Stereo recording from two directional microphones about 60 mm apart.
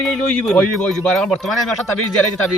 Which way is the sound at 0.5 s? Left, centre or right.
Centre.